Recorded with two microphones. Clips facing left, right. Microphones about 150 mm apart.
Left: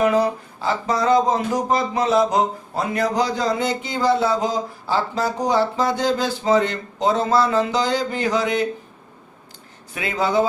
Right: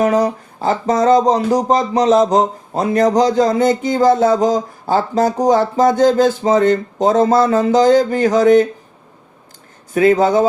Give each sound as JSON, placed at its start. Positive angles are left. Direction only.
{"t": 0.0, "sound": "speech", "side_deg": -40}
{"t": 9.9, "sound": "speech", "side_deg": -45}